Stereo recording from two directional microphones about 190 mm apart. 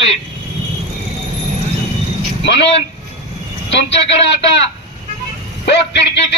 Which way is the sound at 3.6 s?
70° left (ahead or behind).